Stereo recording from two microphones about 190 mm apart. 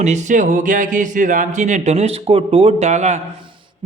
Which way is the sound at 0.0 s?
40° right (ahead or behind).